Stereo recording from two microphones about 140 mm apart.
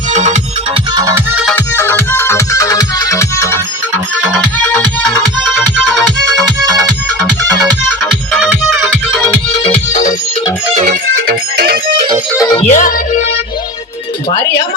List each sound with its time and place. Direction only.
0.1 s music: 55° right (ahead or behind)
1.0 s music: 15° right (ahead or behind)
1.5 s music: 15° left (ahead or behind)
5.4 s music: centre (ahead or behind)
9.6 s music: 60° left (ahead or behind)
11.1 s music: 90° right
12.5 s music: 55° left (ahead or behind)